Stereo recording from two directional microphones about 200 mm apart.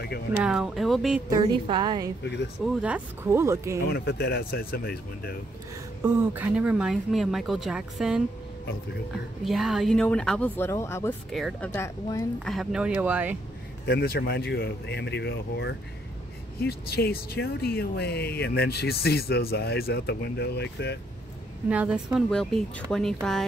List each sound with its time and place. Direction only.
0.4 s speech: 5° right (ahead or behind)
1.3 s a woman's voice: 20° right (ahead or behind)
2.6 s speech: 5° right (ahead or behind)
3.9 s speech: 55° left (ahead or behind)
6.0 s speech: 10° right (ahead or behind); by 11.1 s 15° left (ahead or behind)
11.3 s speech: centre (ahead or behind)
11.7 s a woman's voice: 15° left (ahead or behind)
12.4 s speech: centre (ahead or behind)
13.8 s speech: 55° left (ahead or behind)
21.6 s speech: 5° right (ahead or behind)